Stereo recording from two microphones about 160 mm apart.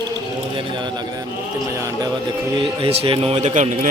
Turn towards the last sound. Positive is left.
turn(degrees=-50)  # may be behind; listen again after turning